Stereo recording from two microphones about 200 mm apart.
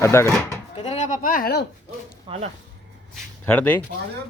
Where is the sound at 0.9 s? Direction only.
40° left (ahead or behind).